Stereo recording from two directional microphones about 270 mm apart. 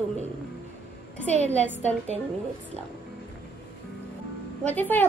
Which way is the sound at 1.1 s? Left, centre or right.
Centre.